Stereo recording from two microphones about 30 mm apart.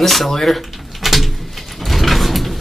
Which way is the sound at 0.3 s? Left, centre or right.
Centre.